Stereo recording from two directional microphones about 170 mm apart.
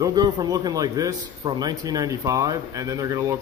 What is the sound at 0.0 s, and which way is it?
A man's voice, 25° right (ahead or behind).